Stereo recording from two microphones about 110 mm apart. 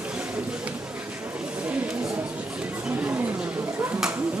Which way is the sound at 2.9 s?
15° right (ahead or behind).